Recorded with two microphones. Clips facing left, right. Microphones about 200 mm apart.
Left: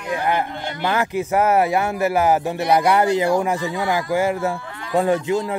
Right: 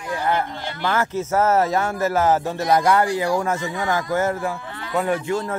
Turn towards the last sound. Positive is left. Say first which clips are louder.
# left 3 dB
turn(degrees=15)  # may be behind; listen again after turning